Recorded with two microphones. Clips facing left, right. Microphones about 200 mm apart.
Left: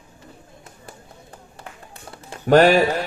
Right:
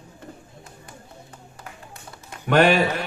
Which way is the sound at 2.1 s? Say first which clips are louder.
Left 5 dB; 35° left (ahead or behind).